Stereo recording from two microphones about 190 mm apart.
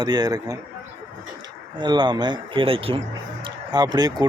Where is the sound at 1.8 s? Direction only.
25° right (ahead or behind).